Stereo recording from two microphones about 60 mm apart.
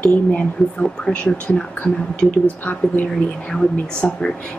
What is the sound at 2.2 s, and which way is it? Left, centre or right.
Speech, centre.